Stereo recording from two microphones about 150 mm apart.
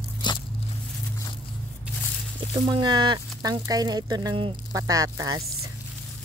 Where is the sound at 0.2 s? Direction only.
30° left (ahead or behind).